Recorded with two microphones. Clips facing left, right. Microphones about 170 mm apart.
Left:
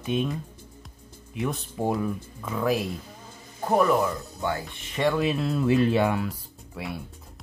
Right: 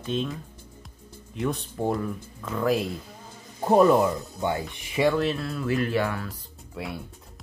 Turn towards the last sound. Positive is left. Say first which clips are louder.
# even
turn(degrees=0)  # may be behind; listen again after turning